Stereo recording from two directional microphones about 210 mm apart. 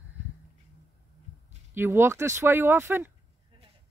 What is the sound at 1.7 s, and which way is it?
Speech, 10° right (ahead or behind).